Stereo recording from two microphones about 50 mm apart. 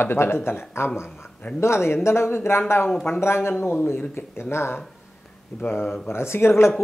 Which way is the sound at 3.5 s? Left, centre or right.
Left.